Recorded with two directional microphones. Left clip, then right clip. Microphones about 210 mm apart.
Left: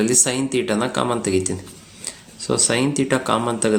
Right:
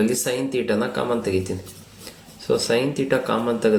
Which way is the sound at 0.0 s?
35° left (ahead or behind).